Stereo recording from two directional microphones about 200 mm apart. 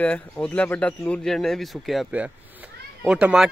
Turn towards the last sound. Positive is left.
turn(degrees=-5)  # may be behind; listen again after turning